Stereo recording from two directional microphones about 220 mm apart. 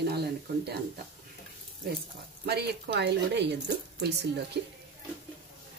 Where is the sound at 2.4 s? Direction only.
45° right (ahead or behind).